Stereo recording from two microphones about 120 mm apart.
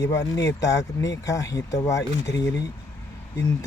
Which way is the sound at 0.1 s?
30° left (ahead or behind).